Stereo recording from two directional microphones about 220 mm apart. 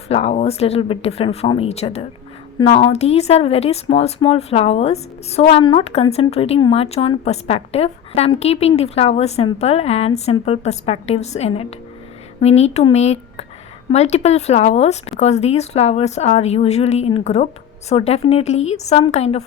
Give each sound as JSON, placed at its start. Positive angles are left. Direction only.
{"t": 0.1, "sound": "speech", "side_deg": 30}